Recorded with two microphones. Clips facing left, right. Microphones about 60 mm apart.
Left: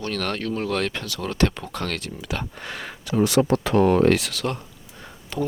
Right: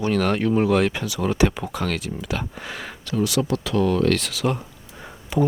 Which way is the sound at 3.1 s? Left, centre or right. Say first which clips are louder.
Left 3 dB; left.